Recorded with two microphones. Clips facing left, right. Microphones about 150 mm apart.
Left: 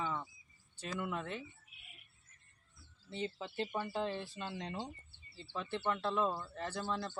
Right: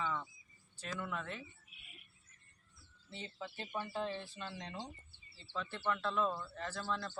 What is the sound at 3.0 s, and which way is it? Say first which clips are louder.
Speech: left 6 dB; 20° left (ahead or behind).